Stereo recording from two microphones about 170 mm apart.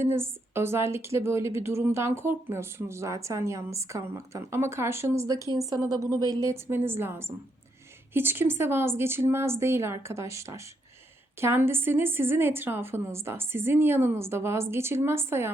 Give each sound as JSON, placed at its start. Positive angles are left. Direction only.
{"t": 0.0, "sound": "a woman's voice", "side_deg": -15}